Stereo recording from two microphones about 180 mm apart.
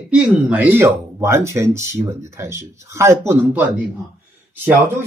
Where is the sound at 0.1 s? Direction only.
5° right (ahead or behind).